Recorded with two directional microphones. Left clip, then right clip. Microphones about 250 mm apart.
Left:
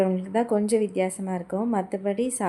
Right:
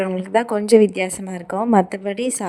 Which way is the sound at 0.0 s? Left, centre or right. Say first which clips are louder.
Right 5 dB; right.